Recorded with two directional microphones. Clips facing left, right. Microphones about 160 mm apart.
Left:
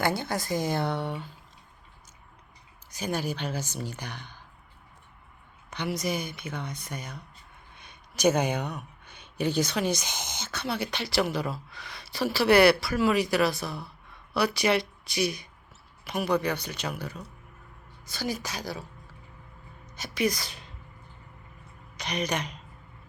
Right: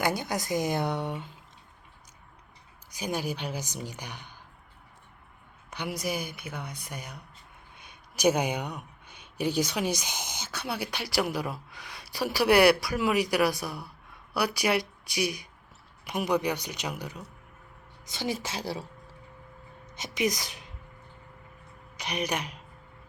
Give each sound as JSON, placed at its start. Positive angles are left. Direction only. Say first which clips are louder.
{"t": 0.0, "sound": "speech", "louder": "left 1 dB", "side_deg": -15}
{"t": 2.9, "sound": "speech", "louder": "left 1 dB", "side_deg": -10}
{"t": 5.7, "sound": "speech", "louder": "left 2 dB", "side_deg": -10}
{"t": 19.9, "sound": "speech", "louder": "left 1 dB", "side_deg": -20}
{"t": 21.9, "sound": "speech", "louder": "left 1 dB", "side_deg": -10}